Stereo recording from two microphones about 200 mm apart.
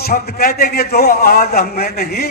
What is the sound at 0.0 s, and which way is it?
A man's voice, 50° left (ahead or behind).